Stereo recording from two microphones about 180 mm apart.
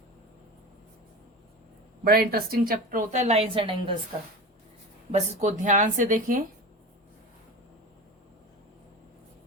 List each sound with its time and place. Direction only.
2.0 s a woman's voice: 55° right (ahead or behind); by 3.9 s 30° right (ahead or behind)
5.1 s speech: 40° right (ahead or behind)